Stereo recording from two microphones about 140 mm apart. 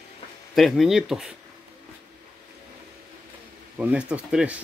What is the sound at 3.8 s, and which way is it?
Speech, 10° right (ahead or behind).